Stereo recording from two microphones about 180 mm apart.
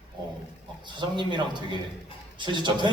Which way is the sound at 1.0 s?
25° right (ahead or behind).